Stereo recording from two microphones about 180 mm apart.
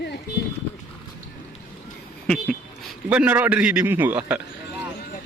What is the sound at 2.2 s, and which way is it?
A man's voice, centre (ahead or behind).